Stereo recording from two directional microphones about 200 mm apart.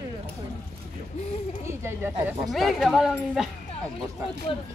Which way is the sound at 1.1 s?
30° left (ahead or behind).